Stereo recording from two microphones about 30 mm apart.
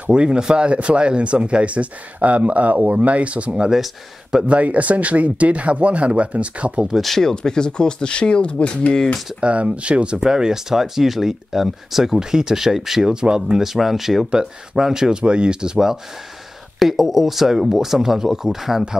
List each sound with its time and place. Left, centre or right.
0.1 s speech: right
2.1 s speech: right
7.0 s speech: centre; by 8.9 s left
9.4 s speech: right
10.1 s speech: right
13.1 s speech: right
13.6 s speech: centre
14.8 s speech: centre
15.2 s speech: right
16.8 s speech: centre